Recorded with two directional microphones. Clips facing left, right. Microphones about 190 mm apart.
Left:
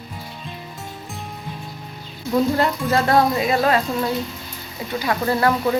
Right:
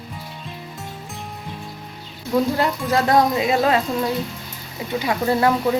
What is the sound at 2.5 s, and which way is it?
Speech, 10° right (ahead or behind).